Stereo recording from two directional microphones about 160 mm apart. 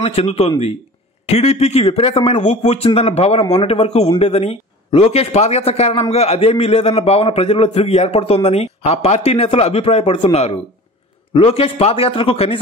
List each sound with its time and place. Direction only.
0.0 s a man's voice: 40° left (ahead or behind)